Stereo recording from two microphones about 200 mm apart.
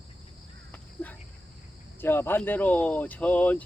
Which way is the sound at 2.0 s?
10° left (ahead or behind).